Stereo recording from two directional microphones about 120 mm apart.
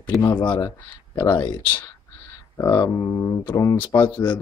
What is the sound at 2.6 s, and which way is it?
A man's voice, 30° left (ahead or behind).